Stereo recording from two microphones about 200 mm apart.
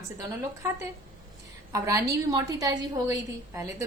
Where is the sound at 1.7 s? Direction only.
15° right (ahead or behind).